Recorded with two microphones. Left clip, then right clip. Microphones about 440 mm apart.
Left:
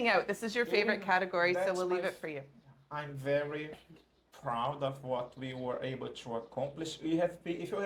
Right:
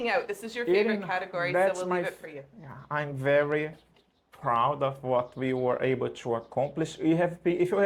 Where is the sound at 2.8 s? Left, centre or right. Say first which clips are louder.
Right 9 dB; right.